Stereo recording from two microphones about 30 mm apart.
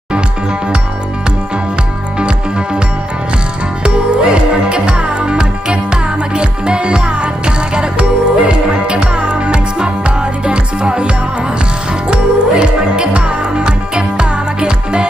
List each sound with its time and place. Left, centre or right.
2.1 s music: right
3.8 s music: right